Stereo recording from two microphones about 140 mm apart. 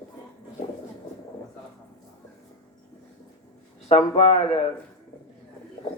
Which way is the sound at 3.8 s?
50° left (ahead or behind).